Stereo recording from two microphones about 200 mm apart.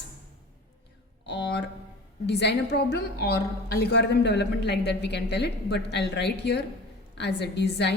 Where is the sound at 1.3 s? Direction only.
60° left (ahead or behind).